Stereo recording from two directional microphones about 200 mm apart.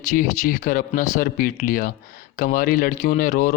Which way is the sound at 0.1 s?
45° left (ahead or behind).